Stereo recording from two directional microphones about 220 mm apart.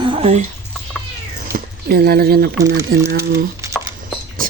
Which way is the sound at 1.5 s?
45° right (ahead or behind).